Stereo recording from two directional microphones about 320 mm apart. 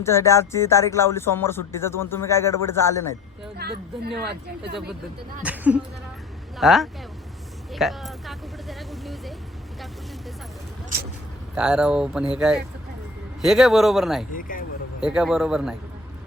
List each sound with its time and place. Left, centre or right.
0.0 s speech: centre
3.6 s speech: right
5.4 s speech: centre
7.7 s vehicle: centre
11.5 s speech: centre
14.3 s speech: left
15.0 s speech: centre